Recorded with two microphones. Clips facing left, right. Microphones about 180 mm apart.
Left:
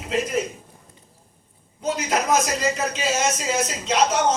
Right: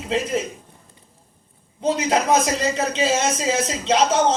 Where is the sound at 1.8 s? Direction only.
30° right (ahead or behind).